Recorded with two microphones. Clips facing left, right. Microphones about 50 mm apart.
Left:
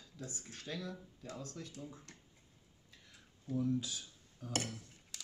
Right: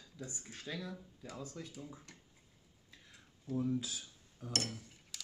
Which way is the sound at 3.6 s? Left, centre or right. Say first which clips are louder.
Left 1 dB; centre.